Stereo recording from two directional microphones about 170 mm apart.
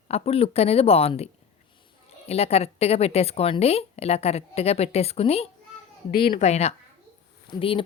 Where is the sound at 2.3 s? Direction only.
35° left (ahead or behind).